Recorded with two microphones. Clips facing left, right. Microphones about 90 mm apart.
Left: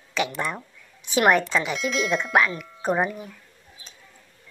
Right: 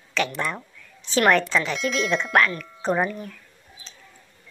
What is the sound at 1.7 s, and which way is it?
Speech, 5° left (ahead or behind).